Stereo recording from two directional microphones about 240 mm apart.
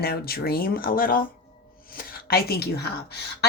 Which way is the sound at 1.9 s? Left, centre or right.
Left.